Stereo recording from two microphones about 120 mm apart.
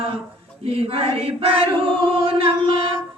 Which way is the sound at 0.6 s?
50° right (ahead or behind).